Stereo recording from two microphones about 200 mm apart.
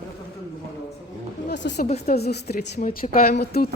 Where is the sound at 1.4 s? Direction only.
60° left (ahead or behind).